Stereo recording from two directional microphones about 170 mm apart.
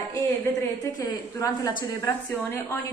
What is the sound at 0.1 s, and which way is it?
A woman's voice, 20° left (ahead or behind).